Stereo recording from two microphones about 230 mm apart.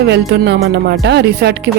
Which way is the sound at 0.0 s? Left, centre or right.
Right.